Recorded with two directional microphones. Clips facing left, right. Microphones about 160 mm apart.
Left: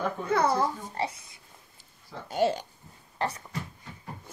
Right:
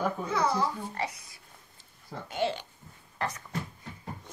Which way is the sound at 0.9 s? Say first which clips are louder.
Left 3 dB; 30° left (ahead or behind).